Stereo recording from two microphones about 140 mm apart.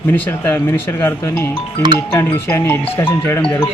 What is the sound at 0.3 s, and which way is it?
Speech, 15° left (ahead or behind).